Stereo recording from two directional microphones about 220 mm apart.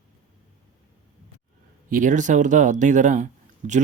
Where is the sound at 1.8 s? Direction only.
35° right (ahead or behind).